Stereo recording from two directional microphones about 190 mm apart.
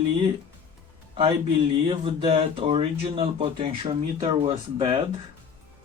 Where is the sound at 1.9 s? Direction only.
30° right (ahead or behind).